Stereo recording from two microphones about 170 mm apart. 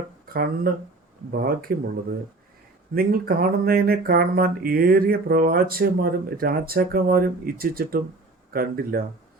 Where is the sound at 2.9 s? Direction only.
60° right (ahead or behind).